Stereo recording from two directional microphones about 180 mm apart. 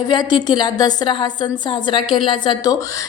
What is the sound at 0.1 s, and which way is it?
A woman's voice, 25° left (ahead or behind).